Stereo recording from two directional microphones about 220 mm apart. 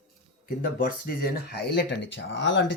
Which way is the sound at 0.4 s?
40° left (ahead or behind).